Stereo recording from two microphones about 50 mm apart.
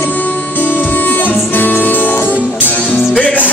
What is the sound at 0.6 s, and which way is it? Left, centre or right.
Music, left.